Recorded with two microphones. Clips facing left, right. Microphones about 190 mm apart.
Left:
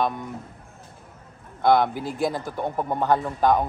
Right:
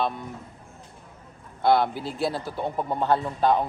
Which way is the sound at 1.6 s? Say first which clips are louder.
Left 2 dB; 15° left (ahead or behind).